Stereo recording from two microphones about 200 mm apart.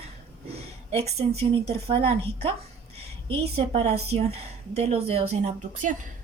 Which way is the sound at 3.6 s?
30° right (ahead or behind).